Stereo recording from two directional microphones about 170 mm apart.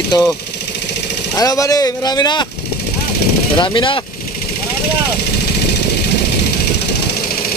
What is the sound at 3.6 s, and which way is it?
Speech, 30° left (ahead or behind).